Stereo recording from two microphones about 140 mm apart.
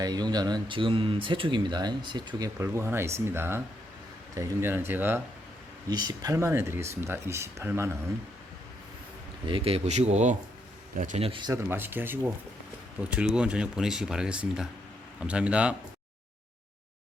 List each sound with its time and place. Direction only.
0.0 s speech: 30° right (ahead or behind)
5.9 s speech: 30° right (ahead or behind)
9.5 s speech: 45° right (ahead or behind)
10.9 s speech: 65° right (ahead or behind)
11.2 s speech: 35° right (ahead or behind)
11.5 s speech: 15° right (ahead or behind)